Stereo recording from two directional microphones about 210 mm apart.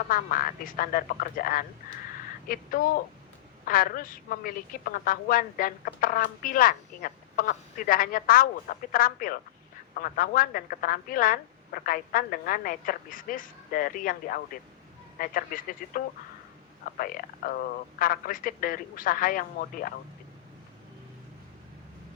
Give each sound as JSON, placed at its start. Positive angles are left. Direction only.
{"t": 0.1, "sound": "a woman's voice", "side_deg": 40}
{"t": 17.0, "sound": "a woman's voice", "side_deg": 45}